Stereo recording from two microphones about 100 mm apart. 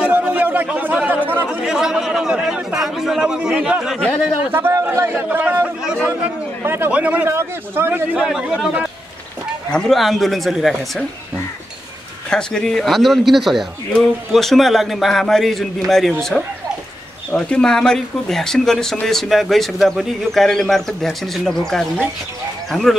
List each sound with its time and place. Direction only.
0.0 s a sound: 15° right (ahead or behind)
1.0 s speech: 20° right (ahead or behind)
1.6 s a man's voice: 5° right (ahead or behind)
4.5 s a man's voice: 20° right (ahead or behind)
7.2 s speech: 25° right (ahead or behind)
8.1 s a man's voice: 10° right (ahead or behind)
12.3 s a man's voice: 5° left (ahead or behind)